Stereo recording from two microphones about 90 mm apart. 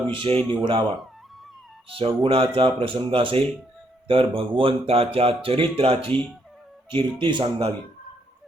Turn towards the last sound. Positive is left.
turn(degrees=-60)  # may be behind; listen again after turning